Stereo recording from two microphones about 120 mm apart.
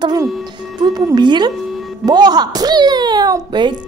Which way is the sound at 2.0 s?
35° right (ahead or behind).